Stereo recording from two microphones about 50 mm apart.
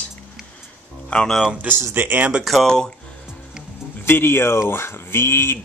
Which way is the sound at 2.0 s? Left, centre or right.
Right.